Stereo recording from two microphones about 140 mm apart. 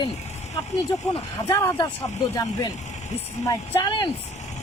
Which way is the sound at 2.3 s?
25° left (ahead or behind).